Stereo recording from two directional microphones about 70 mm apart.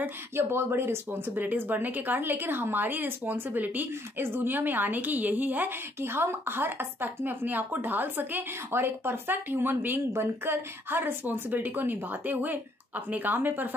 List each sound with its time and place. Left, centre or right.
0.0 s speech: right